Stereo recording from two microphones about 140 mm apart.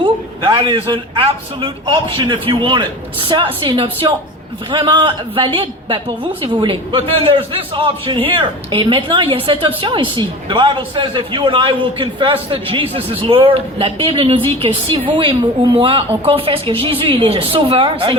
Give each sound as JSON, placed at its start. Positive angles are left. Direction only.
{"t": 0.0, "sound": "a man's voice", "side_deg": -35}